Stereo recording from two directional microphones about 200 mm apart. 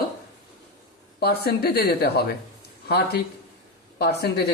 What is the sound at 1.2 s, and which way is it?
A man's voice, 50° left (ahead or behind).